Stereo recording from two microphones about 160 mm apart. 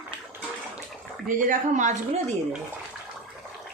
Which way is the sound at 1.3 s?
55° right (ahead or behind).